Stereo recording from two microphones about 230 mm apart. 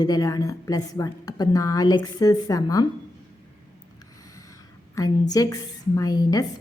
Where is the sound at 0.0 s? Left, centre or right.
Centre.